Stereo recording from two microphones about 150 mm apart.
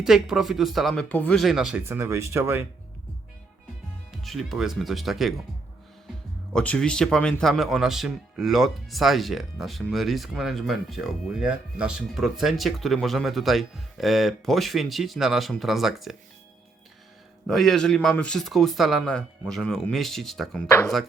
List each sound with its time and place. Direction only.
0.0 s speech: centre (ahead or behind)
1.9 s speech: 15° right (ahead or behind)
4.1 s speech: centre (ahead or behind)
6.5 s speech: 5° left (ahead or behind)
17.4 s speech: centre (ahead or behind)